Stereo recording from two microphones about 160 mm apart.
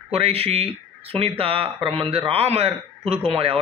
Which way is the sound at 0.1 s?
40° right (ahead or behind).